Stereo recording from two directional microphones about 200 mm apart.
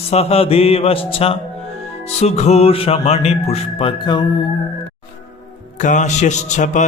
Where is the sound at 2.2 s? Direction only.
30° left (ahead or behind).